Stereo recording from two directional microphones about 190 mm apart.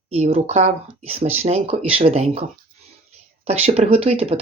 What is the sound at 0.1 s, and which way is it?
Speech, 35° right (ahead or behind).